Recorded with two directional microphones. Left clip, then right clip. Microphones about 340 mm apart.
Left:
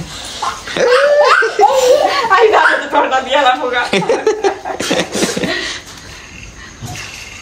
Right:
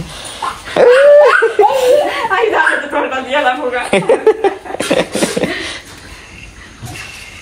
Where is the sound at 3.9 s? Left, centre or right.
Centre.